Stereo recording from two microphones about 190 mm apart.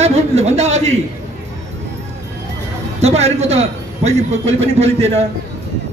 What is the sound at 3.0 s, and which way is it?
A man's voice, 35° right (ahead or behind).